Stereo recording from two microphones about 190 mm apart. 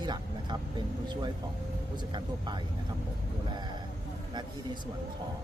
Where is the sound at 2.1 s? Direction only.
25° right (ahead or behind).